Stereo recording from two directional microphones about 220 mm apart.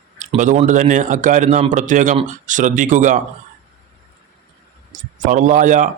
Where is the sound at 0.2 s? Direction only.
35° right (ahead or behind).